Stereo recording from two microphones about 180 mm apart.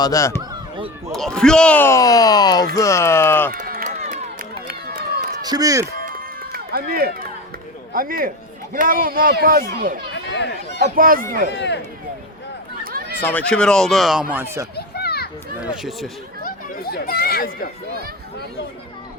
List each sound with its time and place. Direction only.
0.0 s speech: 20° left (ahead or behind)
1.1 s speech: 5° left (ahead or behind)
3.5 s run: 55° right (ahead or behind)
5.4 s speech: 20° right (ahead or behind)
5.8 s run: 50° right (ahead or behind)
7.9 s speech: 50° right (ahead or behind)
10.2 s speech: 70° left (ahead or behind)
10.8 s speech: 50° right (ahead or behind)
11.5 s speech: 75° left (ahead or behind)
12.8 s run: 55° right (ahead or behind)
13.2 s speech: 5° left (ahead or behind); by 14.7 s 15° right (ahead or behind)
14.8 s children playing: 60° left (ahead or behind)
15.6 s speech: 5° right (ahead or behind)
16.4 s speech: 55° left (ahead or behind)